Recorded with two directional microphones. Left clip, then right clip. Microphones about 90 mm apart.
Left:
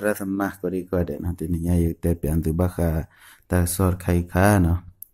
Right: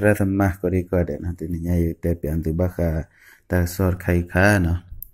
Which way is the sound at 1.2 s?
35° left (ahead or behind).